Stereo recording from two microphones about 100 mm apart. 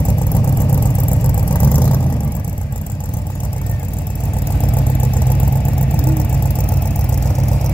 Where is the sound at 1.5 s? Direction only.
20° left (ahead or behind).